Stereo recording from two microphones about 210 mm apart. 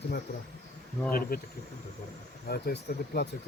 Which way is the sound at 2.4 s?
50° left (ahead or behind).